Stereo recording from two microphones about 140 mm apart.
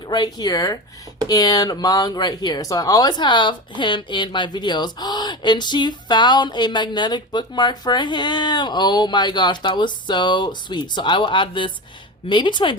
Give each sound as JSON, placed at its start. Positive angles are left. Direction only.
{"t": 0.1, "sound": "speech", "side_deg": 30}